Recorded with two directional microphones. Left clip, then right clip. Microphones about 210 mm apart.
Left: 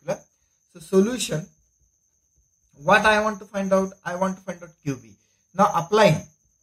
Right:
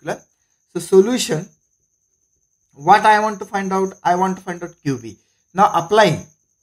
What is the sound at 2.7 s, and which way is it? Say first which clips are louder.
Speech: right 6 dB; 45° right (ahead or behind).